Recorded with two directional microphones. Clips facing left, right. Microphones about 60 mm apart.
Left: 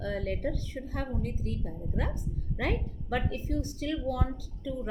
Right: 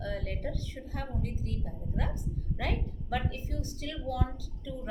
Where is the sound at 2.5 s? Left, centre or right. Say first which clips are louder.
Left 4 dB; left.